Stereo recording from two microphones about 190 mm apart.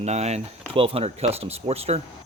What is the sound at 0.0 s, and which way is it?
Speech, 35° right (ahead or behind).